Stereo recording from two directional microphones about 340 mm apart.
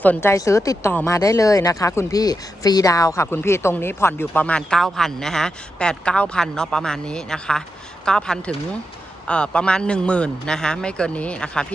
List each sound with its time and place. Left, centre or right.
0.0 s a man's voice: centre